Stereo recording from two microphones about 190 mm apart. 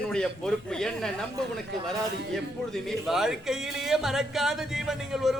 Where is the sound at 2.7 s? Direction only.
Centre (ahead or behind).